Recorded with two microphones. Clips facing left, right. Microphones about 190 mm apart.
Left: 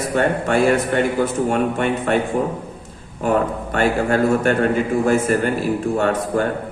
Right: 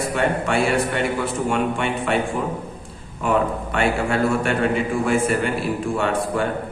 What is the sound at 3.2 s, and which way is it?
A man's voice, 45° left (ahead or behind).